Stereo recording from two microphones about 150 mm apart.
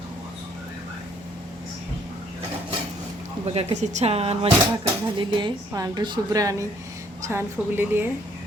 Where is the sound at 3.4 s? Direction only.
45° right (ahead or behind); by 8.1 s 15° right (ahead or behind).